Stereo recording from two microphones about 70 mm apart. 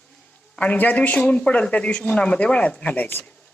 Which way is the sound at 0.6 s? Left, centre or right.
Left.